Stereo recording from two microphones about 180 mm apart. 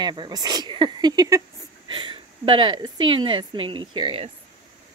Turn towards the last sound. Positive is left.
turn(degrees=-30)  # may be behind; listen again after turning